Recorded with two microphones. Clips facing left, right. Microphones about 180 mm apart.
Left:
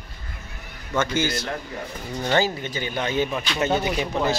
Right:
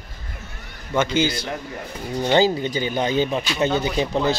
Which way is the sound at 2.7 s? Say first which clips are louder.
Right 4 dB; 25° right (ahead or behind).